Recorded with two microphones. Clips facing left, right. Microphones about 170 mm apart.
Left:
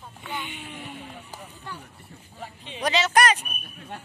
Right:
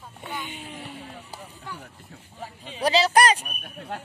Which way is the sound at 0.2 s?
35° right (ahead or behind).